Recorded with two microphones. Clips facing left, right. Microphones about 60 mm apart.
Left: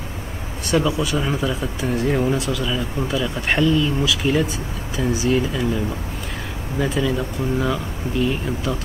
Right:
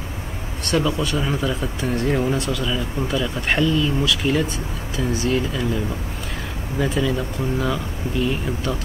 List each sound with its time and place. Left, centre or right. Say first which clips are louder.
0.7 s speech: left 1 dB; centre
6.8 s speech: even; centre